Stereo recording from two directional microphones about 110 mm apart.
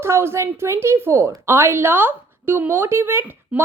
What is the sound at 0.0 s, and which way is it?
A woman's voice, 25° right (ahead or behind).